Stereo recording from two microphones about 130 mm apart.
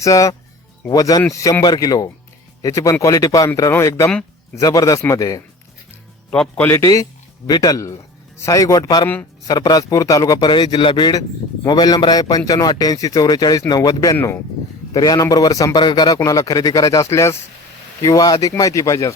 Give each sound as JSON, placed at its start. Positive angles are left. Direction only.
{"t": 0.0, "sound": "a man's voice", "side_deg": 25}
{"t": 6.3, "sound": "a man's voice", "side_deg": 5}
{"t": 6.7, "sound": "a man's voice", "side_deg": 25}